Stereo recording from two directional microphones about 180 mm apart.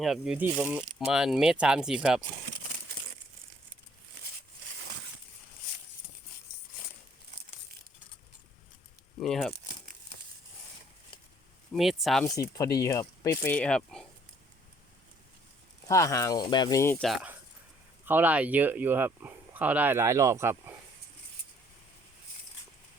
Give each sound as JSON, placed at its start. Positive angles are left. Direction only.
{"t": 0.0, "sound": "speech", "side_deg": -5}
{"t": 9.2, "sound": "speech", "side_deg": 0}
{"t": 11.7, "sound": "speech", "side_deg": 0}
{"t": 12.2, "sound": "speech", "side_deg": 15}
{"t": 15.9, "sound": "speech", "side_deg": 15}
{"t": 17.0, "sound": "speech", "side_deg": 0}